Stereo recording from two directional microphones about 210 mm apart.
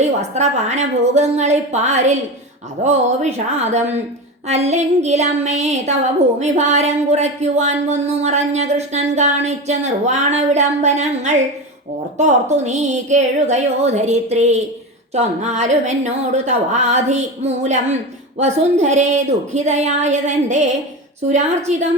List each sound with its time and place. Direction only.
0.0 s a woman's voice: 30° right (ahead or behind)